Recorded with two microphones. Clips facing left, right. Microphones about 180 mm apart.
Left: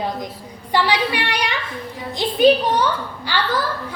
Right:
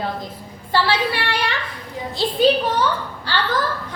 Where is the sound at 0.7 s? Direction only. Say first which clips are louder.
Left 1 dB; 15° left (ahead or behind).